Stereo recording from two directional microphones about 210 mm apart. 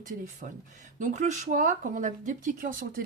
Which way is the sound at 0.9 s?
35° right (ahead or behind).